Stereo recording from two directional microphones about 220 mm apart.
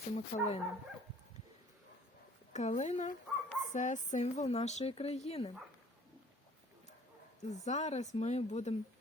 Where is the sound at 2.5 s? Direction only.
30° left (ahead or behind).